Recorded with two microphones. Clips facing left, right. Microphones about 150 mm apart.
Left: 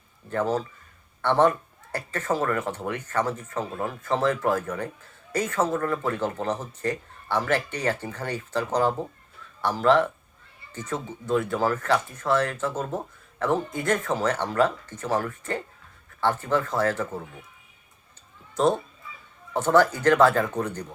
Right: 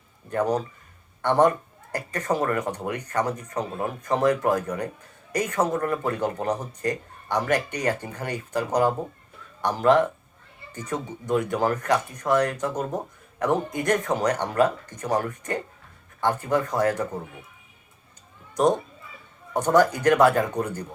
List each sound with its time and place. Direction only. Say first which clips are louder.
0.3 s speech: right 1 dB; 15° right (ahead or behind)
18.5 s speech: right 1 dB; 15° right (ahead or behind)